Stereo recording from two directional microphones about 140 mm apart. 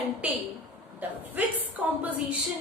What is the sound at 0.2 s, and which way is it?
A woman's voice, 10° right (ahead or behind).